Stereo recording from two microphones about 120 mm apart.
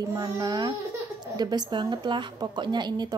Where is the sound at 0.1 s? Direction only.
30° right (ahead or behind).